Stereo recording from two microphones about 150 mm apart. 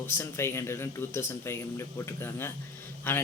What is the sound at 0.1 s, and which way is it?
A man's voice, 15° left (ahead or behind).